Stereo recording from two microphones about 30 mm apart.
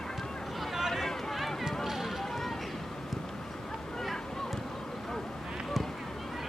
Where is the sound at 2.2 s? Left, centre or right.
Centre.